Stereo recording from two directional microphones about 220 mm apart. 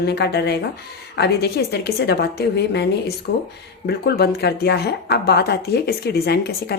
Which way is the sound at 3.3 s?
55° left (ahead or behind).